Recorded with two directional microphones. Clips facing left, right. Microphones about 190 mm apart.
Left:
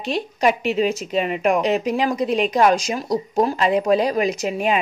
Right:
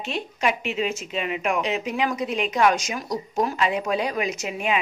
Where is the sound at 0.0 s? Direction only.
35° left (ahead or behind).